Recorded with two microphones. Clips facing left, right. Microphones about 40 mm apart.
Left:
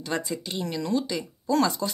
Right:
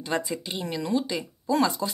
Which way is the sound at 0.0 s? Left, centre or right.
Centre.